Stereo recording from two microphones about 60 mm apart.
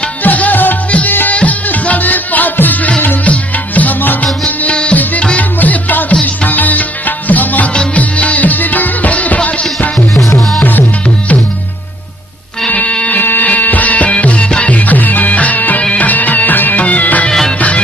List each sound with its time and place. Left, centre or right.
0.2 s music: left
12.6 s music: left
17.3 s music: centre